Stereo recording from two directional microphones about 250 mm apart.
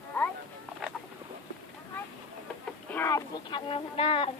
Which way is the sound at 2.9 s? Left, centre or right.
Centre.